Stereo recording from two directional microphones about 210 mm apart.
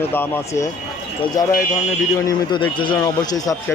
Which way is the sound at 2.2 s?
20° left (ahead or behind).